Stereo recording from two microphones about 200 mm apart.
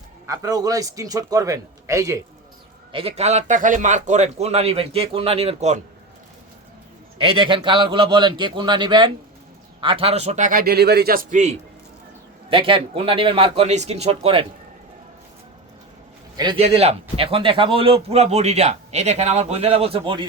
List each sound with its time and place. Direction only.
0.3 s a man's voice: 20° right (ahead or behind)
2.9 s speech: 30° right (ahead or behind)
7.2 s a man's voice: 25° right (ahead or behind)
12.5 s a man's voice: 25° right (ahead or behind)
16.4 s a man's voice: 25° right (ahead or behind)